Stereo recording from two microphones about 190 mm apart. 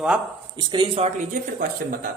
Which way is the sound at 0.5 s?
25° right (ahead or behind).